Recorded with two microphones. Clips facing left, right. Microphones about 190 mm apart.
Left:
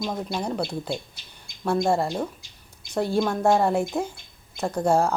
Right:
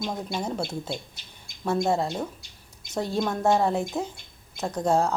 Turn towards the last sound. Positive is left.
turn(degrees=0)  # may be behind; listen again after turning